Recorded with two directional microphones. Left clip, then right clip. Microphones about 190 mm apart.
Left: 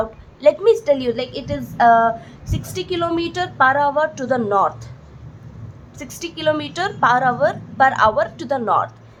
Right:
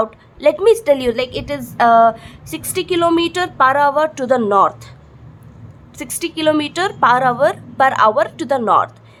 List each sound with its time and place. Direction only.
0.0 s a woman's voice: 35° right (ahead or behind)
6.0 s a woman's voice: 40° right (ahead or behind)